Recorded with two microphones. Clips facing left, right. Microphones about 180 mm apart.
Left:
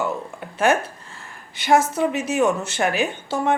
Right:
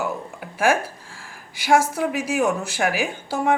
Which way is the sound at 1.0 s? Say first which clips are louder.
Left 1 dB; 90° right.